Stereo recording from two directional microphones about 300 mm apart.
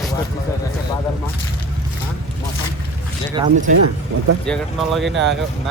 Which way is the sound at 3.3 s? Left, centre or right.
Centre.